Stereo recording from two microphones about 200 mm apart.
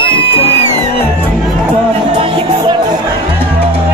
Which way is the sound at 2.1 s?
25° right (ahead or behind).